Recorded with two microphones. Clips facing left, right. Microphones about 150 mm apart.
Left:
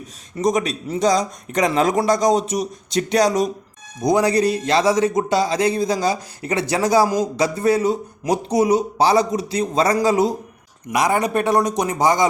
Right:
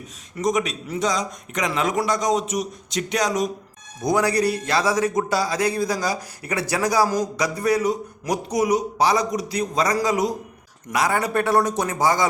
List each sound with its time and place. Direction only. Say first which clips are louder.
0.3 s a man's voice: left 3 dB; 35° left (ahead or behind)
4.0 s a man's voice: left 3 dB; 20° left (ahead or behind)
10.9 s speech: left 3 dB; 20° left (ahead or behind)